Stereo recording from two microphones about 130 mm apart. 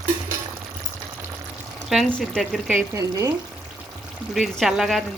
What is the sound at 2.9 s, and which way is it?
Speech, 25° right (ahead or behind).